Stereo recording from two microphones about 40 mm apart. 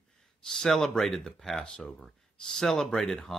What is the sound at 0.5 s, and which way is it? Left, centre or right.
Speech, centre.